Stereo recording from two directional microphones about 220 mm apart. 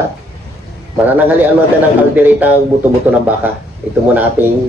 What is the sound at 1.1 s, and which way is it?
Speech, 5° right (ahead or behind).